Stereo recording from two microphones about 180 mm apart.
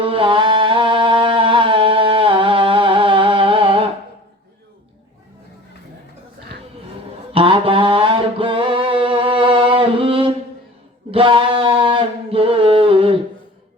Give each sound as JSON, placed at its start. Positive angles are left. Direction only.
{"t": 0.0, "sound": "music", "side_deg": -30}
{"t": 7.3, "sound": "mantra", "side_deg": -30}
{"t": 11.1, "sound": "a sound", "side_deg": -30}